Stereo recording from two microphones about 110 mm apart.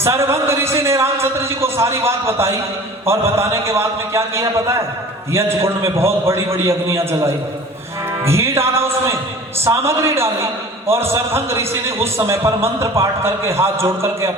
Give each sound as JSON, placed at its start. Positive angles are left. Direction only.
{"t": 0.0, "sound": "a man's voice", "side_deg": -25}